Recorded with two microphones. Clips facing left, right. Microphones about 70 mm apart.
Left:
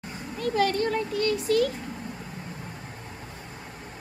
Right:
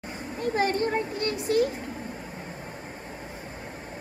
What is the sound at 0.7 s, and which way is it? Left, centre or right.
Speech, right.